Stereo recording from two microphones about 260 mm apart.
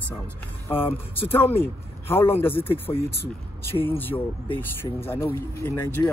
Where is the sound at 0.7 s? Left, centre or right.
Left.